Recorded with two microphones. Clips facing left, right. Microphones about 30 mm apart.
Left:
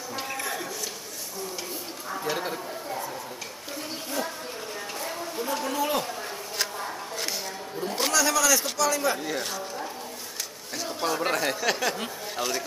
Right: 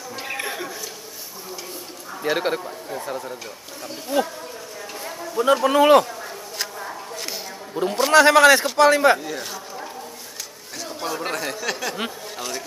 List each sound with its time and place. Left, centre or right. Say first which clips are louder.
0.3 s a sound: right 6 dB; right
2.2 s a man's voice: right 9 dB; right
4.1 s speech: right 9 dB; right
5.4 s a man's voice: right 13 dB; right
6.6 s a sound: right 1 dB; centre
8.1 s a man's voice: right 12 dB; right
9.2 s a man's voice: even; centre